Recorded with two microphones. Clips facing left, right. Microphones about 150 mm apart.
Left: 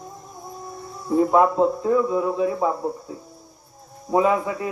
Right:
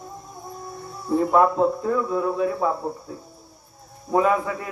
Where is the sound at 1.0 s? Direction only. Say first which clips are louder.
Left 1 dB; 15° left (ahead or behind).